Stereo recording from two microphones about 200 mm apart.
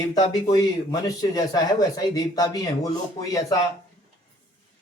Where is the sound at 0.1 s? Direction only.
20° left (ahead or behind).